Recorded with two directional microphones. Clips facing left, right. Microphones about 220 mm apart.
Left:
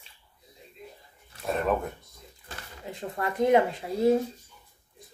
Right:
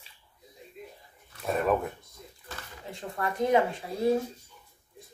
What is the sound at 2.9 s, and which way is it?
Speech, 20° left (ahead or behind).